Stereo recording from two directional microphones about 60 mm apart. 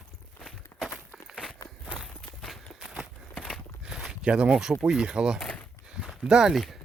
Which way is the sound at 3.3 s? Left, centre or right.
Centre.